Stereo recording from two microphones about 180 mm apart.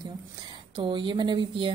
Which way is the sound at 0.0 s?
25° right (ahead or behind).